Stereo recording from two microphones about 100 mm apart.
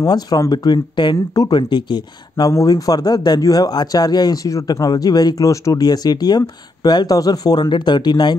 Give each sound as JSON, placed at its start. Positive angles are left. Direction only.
{"t": 0.0, "sound": "speech", "side_deg": 40}
{"t": 1.6, "sound": "speech", "side_deg": 50}